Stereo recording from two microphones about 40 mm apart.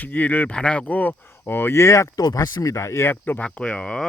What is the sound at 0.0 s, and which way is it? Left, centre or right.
Speech, left.